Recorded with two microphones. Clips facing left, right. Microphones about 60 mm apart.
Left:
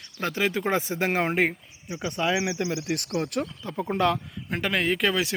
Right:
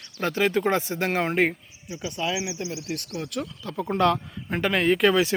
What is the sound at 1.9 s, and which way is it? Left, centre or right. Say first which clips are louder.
Speech: left 2 dB; left.